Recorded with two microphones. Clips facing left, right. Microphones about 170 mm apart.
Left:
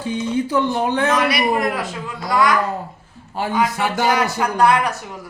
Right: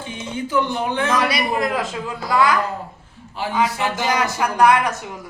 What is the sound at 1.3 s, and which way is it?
Speech, 25° right (ahead or behind).